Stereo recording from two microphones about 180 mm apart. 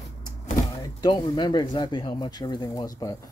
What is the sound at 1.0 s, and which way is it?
Speech, 25° left (ahead or behind).